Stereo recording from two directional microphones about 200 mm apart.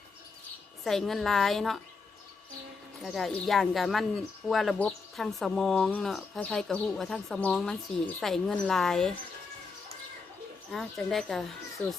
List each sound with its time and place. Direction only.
0.9 s speech: centre (ahead or behind)
3.0 s speech: centre (ahead or behind)
10.7 s speech: centre (ahead or behind)